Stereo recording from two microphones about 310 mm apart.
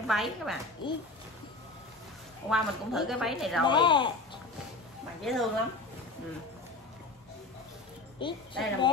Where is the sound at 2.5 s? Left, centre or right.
Centre.